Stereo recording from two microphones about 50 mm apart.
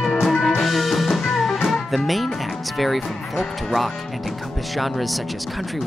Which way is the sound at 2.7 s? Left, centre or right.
Centre.